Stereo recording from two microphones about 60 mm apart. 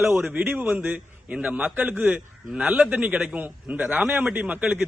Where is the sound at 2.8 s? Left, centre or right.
Right.